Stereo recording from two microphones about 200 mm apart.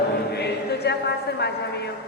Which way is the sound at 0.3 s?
55° left (ahead or behind).